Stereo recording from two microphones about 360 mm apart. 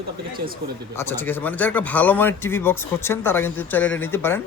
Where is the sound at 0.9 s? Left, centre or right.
Centre.